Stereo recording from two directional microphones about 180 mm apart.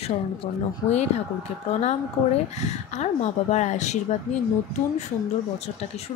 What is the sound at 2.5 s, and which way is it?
A woman's voice, 40° left (ahead or behind).